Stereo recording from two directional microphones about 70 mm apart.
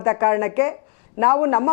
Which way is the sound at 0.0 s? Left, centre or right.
Left.